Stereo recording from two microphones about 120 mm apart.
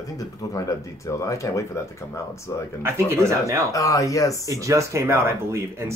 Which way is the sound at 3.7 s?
25° left (ahead or behind).